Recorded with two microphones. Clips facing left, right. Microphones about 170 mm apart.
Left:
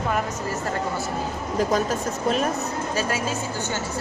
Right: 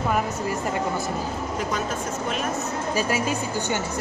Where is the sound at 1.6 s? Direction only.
40° left (ahead or behind).